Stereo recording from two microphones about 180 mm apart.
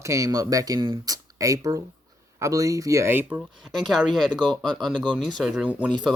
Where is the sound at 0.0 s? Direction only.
15° right (ahead or behind).